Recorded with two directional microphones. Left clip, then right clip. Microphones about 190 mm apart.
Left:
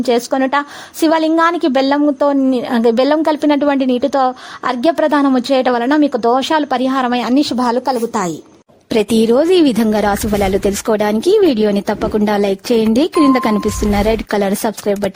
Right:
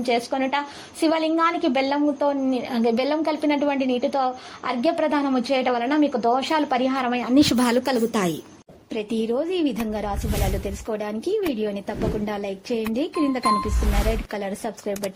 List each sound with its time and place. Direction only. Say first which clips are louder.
0.0 s a woman's voice: left 8 dB; 45° left (ahead or behind)
8.9 s speech: left 13 dB; 70° left (ahead or behind)